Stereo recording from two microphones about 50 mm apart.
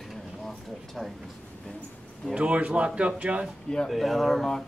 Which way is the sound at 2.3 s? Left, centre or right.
Right.